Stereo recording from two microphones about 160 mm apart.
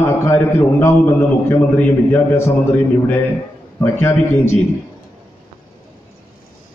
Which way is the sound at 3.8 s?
15° left (ahead or behind).